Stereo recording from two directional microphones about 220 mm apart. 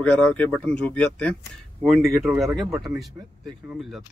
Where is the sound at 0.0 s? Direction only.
5° left (ahead or behind).